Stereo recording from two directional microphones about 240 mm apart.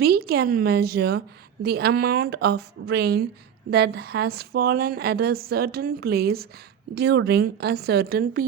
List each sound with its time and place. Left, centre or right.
0.0 s a woman's voice: right